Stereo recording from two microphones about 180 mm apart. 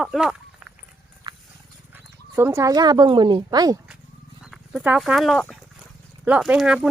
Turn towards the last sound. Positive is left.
turn(degrees=-5)  # may be behind; listen again after turning